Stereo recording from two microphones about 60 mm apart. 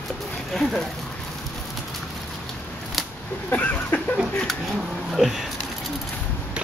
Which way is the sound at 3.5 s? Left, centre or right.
Left.